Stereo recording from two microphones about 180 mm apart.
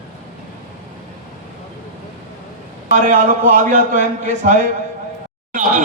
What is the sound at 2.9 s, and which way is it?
A man's voice, 45° right (ahead or behind).